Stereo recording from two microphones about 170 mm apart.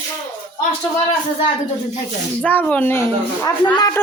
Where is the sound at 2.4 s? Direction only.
10° left (ahead or behind).